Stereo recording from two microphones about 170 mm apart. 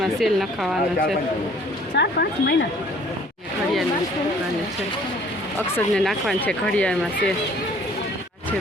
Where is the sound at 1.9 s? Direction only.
80° left.